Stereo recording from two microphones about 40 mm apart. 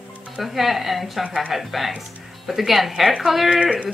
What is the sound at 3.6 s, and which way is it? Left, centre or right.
Speech, right.